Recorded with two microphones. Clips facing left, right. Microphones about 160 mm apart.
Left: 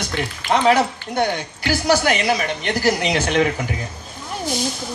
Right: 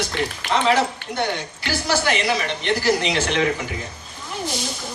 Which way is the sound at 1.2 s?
45° left (ahead or behind).